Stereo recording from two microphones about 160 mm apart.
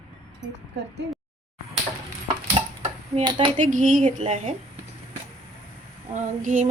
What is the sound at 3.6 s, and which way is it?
Speech, 55° right (ahead or behind).